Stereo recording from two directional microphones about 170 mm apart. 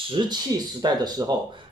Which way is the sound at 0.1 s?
25° right (ahead or behind).